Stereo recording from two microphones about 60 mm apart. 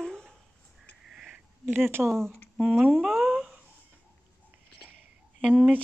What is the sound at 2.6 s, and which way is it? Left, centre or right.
Speech, right.